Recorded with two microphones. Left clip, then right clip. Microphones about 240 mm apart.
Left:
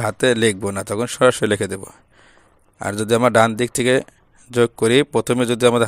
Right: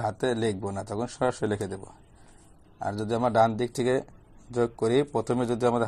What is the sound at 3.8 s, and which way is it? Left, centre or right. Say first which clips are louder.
Speech: left 9 dB; left.